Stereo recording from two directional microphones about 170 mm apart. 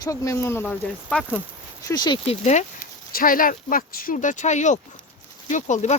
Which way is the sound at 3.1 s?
55° left (ahead or behind).